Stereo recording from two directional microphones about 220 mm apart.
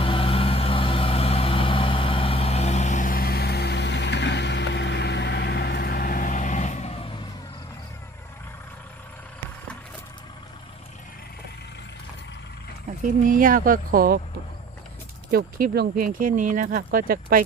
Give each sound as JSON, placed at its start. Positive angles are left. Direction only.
{"t": 0.0, "sound": "vehicle", "side_deg": 25}
{"t": 13.2, "sound": "speech", "side_deg": -40}
{"t": 15.3, "sound": "speech", "side_deg": -45}